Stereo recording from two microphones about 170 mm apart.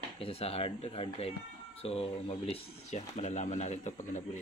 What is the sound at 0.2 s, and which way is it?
Speech, 35° left (ahead or behind).